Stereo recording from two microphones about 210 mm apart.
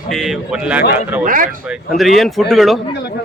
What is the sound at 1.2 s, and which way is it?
Speech, 40° right (ahead or behind).